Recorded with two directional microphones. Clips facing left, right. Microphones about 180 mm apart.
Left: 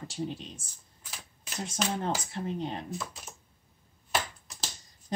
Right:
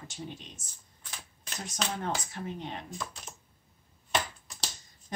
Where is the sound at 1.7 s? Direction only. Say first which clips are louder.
Left 2 dB; 30° left (ahead or behind).